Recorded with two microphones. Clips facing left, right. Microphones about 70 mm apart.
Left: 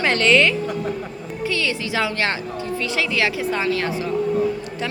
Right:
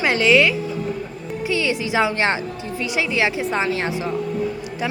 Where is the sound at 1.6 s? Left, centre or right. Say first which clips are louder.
Right 5 dB; right.